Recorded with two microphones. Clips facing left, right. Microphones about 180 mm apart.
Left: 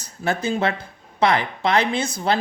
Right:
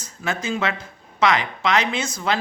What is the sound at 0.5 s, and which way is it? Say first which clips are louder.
Speech: left 1 dB; 30° left (ahead or behind).